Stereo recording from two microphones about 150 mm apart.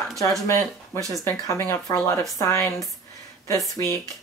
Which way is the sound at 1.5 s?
15° left (ahead or behind).